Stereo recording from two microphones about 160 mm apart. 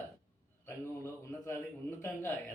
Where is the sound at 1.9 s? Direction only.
15° left (ahead or behind).